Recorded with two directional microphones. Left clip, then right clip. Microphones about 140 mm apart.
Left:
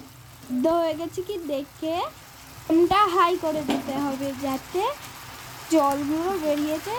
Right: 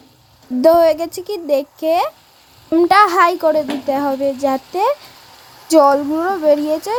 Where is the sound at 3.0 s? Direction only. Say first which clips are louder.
Right 9 dB; 90° right.